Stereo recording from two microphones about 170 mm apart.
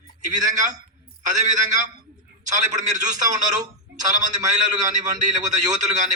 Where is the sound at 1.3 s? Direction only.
45° right (ahead or behind).